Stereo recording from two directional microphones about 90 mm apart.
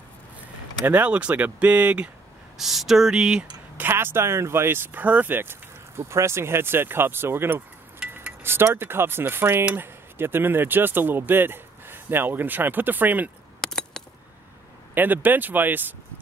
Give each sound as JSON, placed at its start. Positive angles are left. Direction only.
{"t": 0.8, "sound": "speech", "side_deg": -20}
{"t": 2.5, "sound": "speech", "side_deg": -5}
{"t": 3.7, "sound": "speech", "side_deg": -25}
{"t": 8.1, "sound": "a sound", "side_deg": -25}
{"t": 9.7, "sound": "speech", "side_deg": -25}
{"t": 13.6, "sound": "a sound", "side_deg": 5}
{"t": 15.0, "sound": "speech", "side_deg": -20}